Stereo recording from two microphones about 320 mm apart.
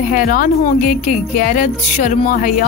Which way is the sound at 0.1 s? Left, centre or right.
Left.